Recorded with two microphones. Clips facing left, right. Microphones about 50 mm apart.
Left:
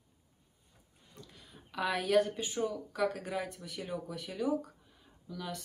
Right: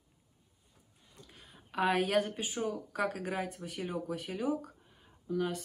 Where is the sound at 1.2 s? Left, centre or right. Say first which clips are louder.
Even; right.